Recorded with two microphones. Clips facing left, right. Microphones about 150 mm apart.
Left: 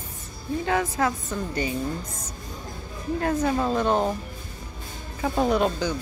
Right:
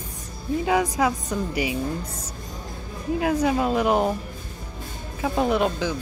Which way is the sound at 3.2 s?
10° right (ahead or behind).